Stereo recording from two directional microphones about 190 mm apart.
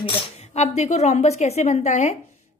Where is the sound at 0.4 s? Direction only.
35° left (ahead or behind).